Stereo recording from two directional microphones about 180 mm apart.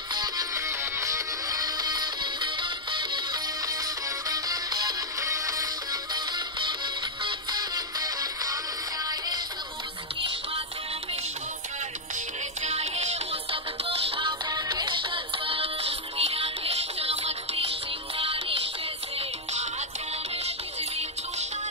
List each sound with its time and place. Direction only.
0.1 s music: 20° right (ahead or behind)
12.6 s music: 35° right (ahead or behind)